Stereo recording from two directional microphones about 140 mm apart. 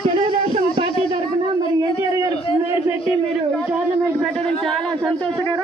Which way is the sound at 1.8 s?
25° right (ahead or behind).